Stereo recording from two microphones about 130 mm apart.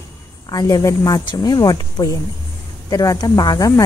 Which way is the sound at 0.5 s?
30° left (ahead or behind).